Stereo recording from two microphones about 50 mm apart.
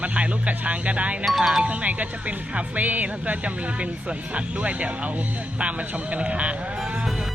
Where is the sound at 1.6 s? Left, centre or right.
Right.